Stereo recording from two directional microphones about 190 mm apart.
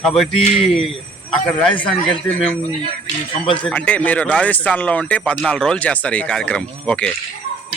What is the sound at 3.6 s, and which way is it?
Speech, 5° left (ahead or behind).